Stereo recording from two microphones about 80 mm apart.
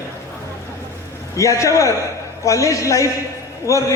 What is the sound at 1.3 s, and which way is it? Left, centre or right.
A man's voice, left.